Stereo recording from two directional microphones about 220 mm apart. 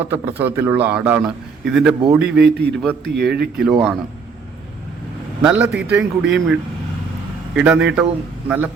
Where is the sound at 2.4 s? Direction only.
50° right (ahead or behind).